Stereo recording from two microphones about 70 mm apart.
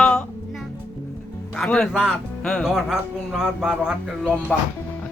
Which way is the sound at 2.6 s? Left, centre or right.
Centre.